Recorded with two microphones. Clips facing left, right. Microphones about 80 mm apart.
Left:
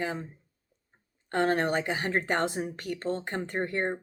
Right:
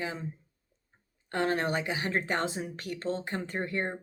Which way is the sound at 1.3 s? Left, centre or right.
Left.